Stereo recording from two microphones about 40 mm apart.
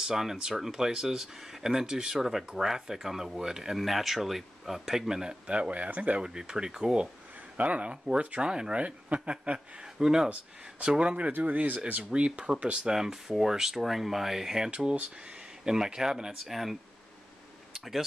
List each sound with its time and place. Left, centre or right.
0.0 s speech: centre
5.5 s speech: right
6.2 s speech: centre
7.5 s speech: right; by 8.7 s centre
8.7 s speech: right
9.9 s speech: centre
10.8 s speech: right
11.5 s speech: right
11.9 s speech: right
12.8 s speech: centre
14.7 s speech: right
15.6 s speech: centre
17.7 s a sound: centre